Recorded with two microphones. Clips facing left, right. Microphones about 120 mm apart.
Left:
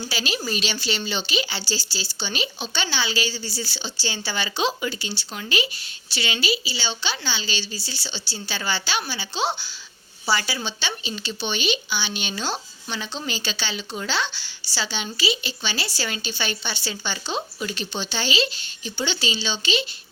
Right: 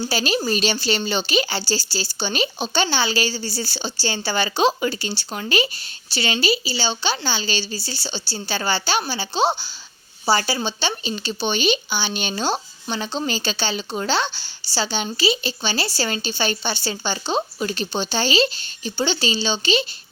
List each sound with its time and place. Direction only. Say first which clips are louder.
0.1 s speech: right 5 dB; 40° right (ahead or behind)